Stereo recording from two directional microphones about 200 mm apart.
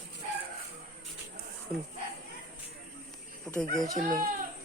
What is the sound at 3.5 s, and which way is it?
Speech, 5° left (ahead or behind).